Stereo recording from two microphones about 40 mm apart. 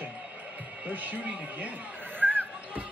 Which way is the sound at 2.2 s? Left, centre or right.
Right.